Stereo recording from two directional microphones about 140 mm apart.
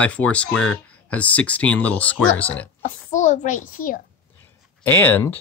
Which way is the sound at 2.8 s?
60° left (ahead or behind).